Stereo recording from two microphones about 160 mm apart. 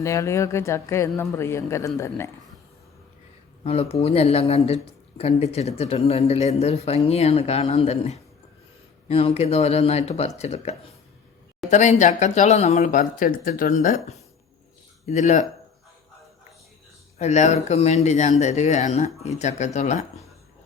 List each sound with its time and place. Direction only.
0.0 s speech: 20° left (ahead or behind)
3.6 s speech: 40° left (ahead or behind); by 13.9 s 60° left (ahead or behind)
15.0 s speech: 45° left (ahead or behind)
17.2 s speech: 45° left (ahead or behind)